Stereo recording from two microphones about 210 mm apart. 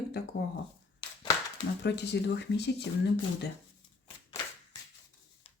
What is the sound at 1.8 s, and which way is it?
Speech, 55° left (ahead or behind).